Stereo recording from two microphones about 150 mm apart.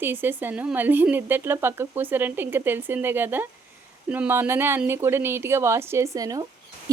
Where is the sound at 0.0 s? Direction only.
15° right (ahead or behind).